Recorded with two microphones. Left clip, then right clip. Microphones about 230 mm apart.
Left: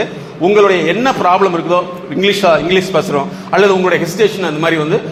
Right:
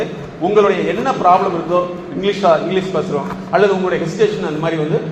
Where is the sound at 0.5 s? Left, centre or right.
Left.